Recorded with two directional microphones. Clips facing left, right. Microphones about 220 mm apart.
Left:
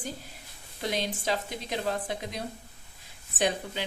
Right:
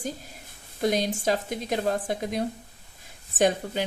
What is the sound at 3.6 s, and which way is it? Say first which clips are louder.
Speech: right 6 dB; 45° right (ahead or behind).